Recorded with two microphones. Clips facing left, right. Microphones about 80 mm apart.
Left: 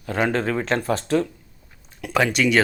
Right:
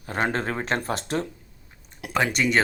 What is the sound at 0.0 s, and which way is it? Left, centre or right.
Speech, right.